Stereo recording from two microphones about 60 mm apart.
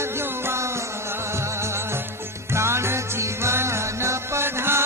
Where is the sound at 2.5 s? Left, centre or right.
Right.